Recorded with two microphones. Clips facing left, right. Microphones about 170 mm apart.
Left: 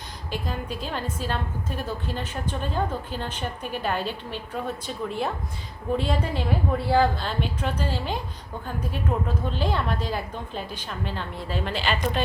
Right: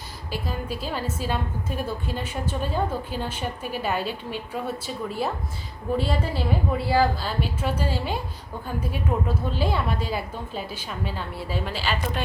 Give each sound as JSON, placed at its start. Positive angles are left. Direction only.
{"t": 0.3, "sound": "a woman's voice", "side_deg": -5}